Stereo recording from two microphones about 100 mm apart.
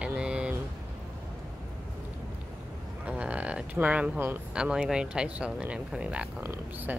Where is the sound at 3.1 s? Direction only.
10° right (ahead or behind).